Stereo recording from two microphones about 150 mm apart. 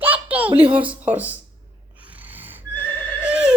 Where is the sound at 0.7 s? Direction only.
10° right (ahead or behind).